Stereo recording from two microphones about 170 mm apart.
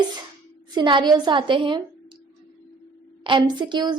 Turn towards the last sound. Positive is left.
turn(degrees=-25)  # may be behind; listen again after turning